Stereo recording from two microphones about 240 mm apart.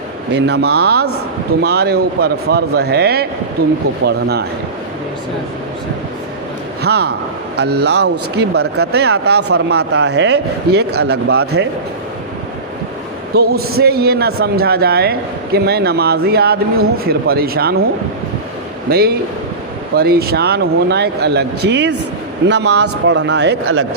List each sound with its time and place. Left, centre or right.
0.3 s speech: right
6.8 s speech: right
13.3 s speech: right
18.9 s speech: right